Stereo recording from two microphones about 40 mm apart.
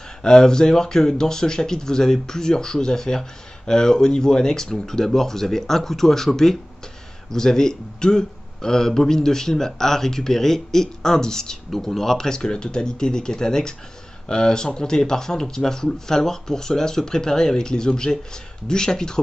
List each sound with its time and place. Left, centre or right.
0.2 s speech: centre